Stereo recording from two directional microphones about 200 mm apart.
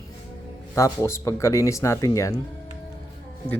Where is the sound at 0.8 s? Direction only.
15° left (ahead or behind).